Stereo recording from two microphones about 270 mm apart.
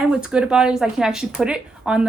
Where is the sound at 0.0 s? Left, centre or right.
Centre.